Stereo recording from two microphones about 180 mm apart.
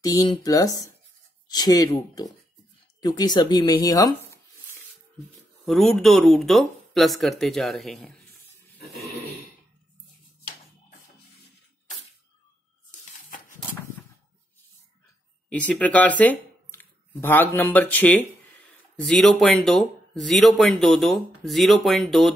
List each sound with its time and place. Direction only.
0.0 s speech: 20° left (ahead or behind)
5.7 s speech: centre (ahead or behind)
13.6 s a sound: 10° left (ahead or behind)
15.5 s speech: 5° left (ahead or behind)